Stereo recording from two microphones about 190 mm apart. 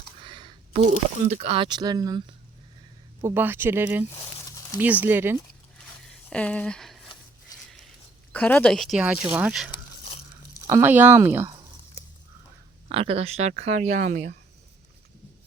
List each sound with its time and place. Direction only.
0.3 s speech: 25° right (ahead or behind)
3.2 s speech: 10° right (ahead or behind)
6.0 s a sound: 5° left (ahead or behind)
8.3 s speech: 10° left (ahead or behind); by 11.5 s 10° right (ahead or behind)
12.9 s speech: 30° right (ahead or behind)